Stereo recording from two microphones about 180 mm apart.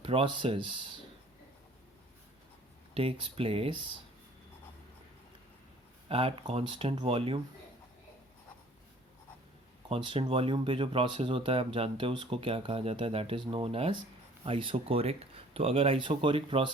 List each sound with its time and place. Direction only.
0.0 s speech: 30° right (ahead or behind)
2.9 s speech: 30° right (ahead or behind)
6.1 s speech: 35° right (ahead or behind)
9.9 s speech: 30° right (ahead or behind)